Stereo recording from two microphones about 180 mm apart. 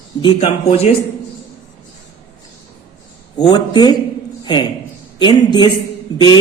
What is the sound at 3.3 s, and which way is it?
Speech, 25° left (ahead or behind).